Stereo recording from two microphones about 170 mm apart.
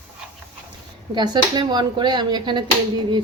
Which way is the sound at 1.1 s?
25° right (ahead or behind).